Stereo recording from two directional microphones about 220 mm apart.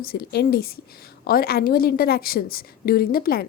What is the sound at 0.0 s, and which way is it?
A woman's voice, 45° left (ahead or behind).